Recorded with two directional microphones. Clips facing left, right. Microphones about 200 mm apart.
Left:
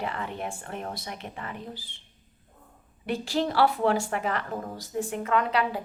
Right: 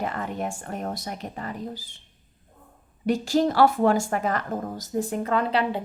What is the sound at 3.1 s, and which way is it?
A woman's voice, 45° right (ahead or behind).